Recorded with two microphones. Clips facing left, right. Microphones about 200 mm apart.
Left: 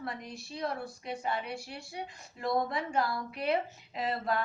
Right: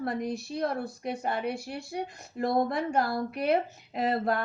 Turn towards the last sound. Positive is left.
turn(degrees=-50)  # may be behind; listen again after turning